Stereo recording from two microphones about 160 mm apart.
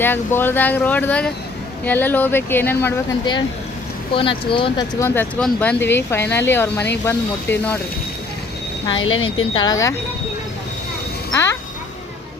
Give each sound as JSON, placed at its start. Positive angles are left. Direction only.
{"t": 0.0, "sound": "speech", "side_deg": 15}
{"t": 4.1, "sound": "speech", "side_deg": 35}
{"t": 4.9, "sound": "speech", "side_deg": 15}
{"t": 8.9, "sound": "speech", "side_deg": 35}